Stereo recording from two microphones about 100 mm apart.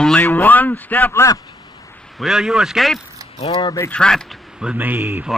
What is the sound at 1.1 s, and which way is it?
Speech, 30° left (ahead or behind).